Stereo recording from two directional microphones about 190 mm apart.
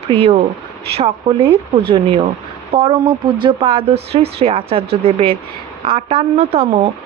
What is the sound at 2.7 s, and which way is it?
A woman's voice, 30° right (ahead or behind).